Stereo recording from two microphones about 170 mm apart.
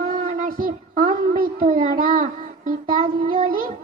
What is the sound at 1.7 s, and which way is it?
Child singing, 55° right (ahead or behind).